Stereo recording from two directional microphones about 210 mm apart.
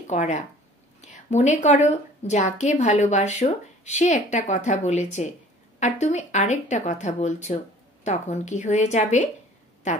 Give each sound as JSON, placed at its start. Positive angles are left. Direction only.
{"t": 0.0, "sound": "a woman's voice", "side_deg": 35}